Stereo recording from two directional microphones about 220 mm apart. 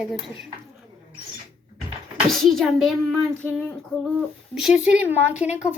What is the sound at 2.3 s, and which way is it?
Speech, centre (ahead or behind).